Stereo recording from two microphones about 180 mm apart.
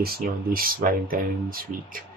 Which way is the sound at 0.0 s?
55° right (ahead or behind).